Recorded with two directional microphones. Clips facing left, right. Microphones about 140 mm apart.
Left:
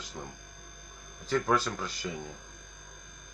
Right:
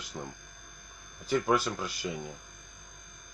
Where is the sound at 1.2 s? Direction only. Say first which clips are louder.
Right 1 dB; 5° right (ahead or behind).